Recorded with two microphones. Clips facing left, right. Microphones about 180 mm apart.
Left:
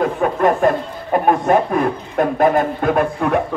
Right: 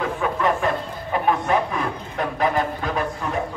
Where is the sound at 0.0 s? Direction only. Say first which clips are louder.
Left 6 dB; 50° left (ahead or behind).